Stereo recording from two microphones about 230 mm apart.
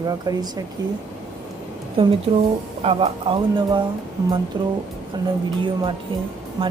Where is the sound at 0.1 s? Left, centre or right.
Centre.